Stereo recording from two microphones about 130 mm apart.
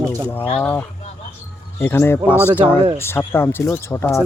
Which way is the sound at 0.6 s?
15° left (ahead or behind).